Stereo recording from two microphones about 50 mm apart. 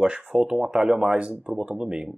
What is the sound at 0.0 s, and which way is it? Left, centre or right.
Speech, right.